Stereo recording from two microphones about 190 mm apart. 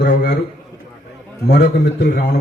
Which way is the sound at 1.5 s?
60° left (ahead or behind).